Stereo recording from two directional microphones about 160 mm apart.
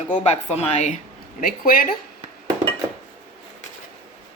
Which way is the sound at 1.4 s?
60° left (ahead or behind).